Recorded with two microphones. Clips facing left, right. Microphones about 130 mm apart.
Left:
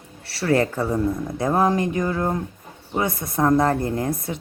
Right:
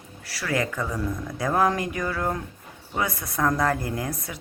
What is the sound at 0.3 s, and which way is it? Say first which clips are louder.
A woman's voice: left 7 dB; 30° left (ahead or behind).